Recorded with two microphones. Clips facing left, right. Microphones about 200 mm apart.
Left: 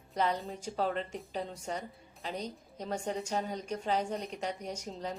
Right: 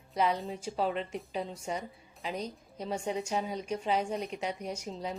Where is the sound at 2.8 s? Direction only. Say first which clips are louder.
Right 2 dB; 5° right (ahead or behind).